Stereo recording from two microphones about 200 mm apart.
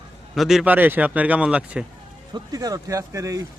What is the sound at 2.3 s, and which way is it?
A man's voice, 20° right (ahead or behind).